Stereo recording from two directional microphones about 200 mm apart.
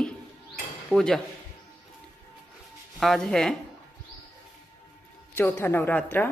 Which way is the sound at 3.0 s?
Centre (ahead or behind).